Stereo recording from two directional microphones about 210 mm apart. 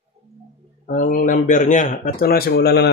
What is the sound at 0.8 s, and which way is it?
A man's voice, 40° left (ahead or behind).